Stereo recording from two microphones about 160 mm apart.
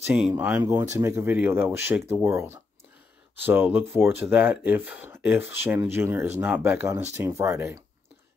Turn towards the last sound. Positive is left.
turn(degrees=-15)  # may be behind; listen again after turning